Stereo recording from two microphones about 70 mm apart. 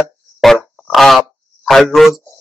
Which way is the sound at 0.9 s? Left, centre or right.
Centre.